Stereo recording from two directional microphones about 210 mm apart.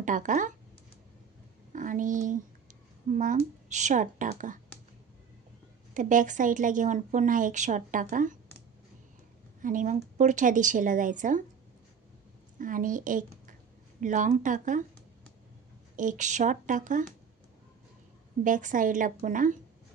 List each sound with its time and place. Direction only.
0.0 s speech: 40° right (ahead or behind)
1.7 s speech: 40° right (ahead or behind)
5.9 s speech: 35° right (ahead or behind)
9.6 s speech: 40° right (ahead or behind)
12.5 s a woman's voice: 40° right (ahead or behind)
16.0 s speech: 35° right (ahead or behind)
18.4 s speech: 40° right (ahead or behind)